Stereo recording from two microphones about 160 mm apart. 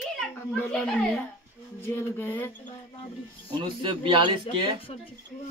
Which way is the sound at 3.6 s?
30° right (ahead or behind).